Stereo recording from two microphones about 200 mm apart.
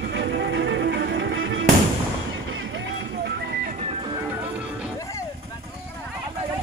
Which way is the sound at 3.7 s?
30° right (ahead or behind).